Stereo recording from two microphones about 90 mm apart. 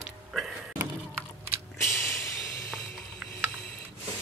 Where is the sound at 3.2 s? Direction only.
10° right (ahead or behind).